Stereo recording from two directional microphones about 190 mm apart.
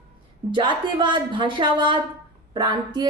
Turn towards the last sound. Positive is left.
turn(degrees=-20)  # may be behind; listen again after turning